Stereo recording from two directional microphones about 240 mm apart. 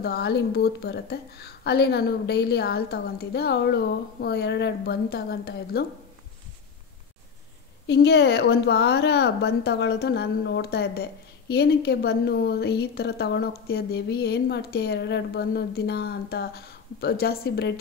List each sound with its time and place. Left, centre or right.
0.0 s speech: left
7.8 s speech: left